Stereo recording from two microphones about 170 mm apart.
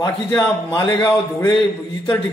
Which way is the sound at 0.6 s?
25° left (ahead or behind).